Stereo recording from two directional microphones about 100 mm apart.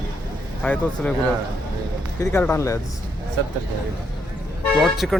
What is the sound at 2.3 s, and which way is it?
Speech, 20° left (ahead or behind).